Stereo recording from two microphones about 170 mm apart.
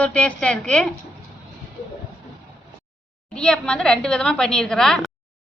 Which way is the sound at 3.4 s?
5° left (ahead or behind).